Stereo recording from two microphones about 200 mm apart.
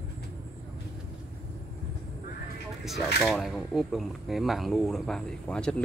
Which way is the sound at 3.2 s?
Centre (ahead or behind).